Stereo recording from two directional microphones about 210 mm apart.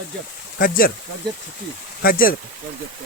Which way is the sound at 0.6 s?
45° left (ahead or behind).